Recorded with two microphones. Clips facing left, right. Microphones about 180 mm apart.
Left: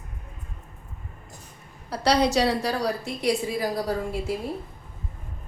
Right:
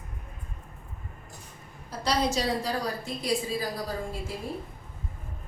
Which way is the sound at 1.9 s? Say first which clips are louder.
Left 6 dB; 70° left (ahead or behind).